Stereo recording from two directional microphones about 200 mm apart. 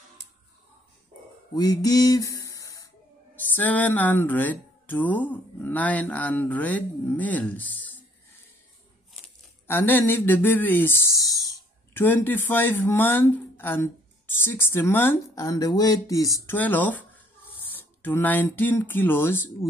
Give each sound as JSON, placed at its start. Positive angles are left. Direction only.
{"t": 1.5, "sound": "a sound", "side_deg": 20}
{"t": 3.3, "sound": "speech", "side_deg": 10}
{"t": 9.2, "sound": "speech", "side_deg": 10}